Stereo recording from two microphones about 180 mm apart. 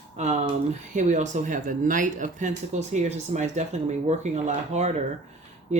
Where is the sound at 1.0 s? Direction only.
40° right (ahead or behind).